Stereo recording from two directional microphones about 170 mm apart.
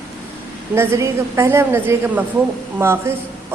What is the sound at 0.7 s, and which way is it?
Speech, 15° right (ahead or behind).